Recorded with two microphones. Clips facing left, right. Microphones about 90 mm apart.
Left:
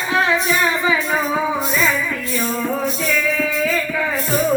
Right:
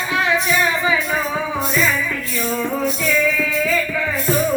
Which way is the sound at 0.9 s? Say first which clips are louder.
Left 1 dB; 20° left (ahead or behind).